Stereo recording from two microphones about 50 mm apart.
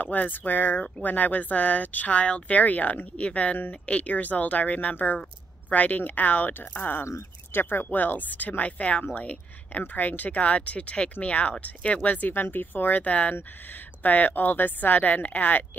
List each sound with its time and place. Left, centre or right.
0.0 s speech: left
7.5 s speech: left